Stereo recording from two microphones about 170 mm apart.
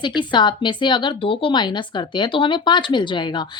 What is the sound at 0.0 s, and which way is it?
Speech, 25° left (ahead or behind).